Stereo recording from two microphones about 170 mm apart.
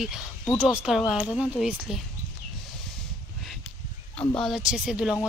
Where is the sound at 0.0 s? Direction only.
5° right (ahead or behind).